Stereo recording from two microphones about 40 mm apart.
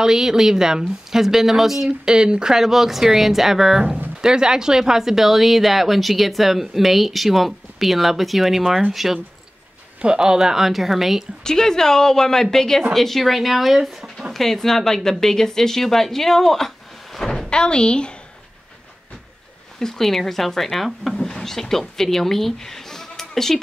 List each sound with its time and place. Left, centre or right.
0.0 s a woman's voice: centre
2.0 s a woman's voice: right; by 9.2 s centre
10.0 s a woman's voice: centre
11.4 s a woman's voice: centre
14.3 s a woman's voice: centre
17.5 s speech: left
19.8 s a woman's voice: centre
21.2 s speech: centre